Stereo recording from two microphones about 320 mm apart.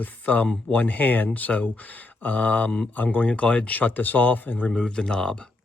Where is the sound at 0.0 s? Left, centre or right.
Centre.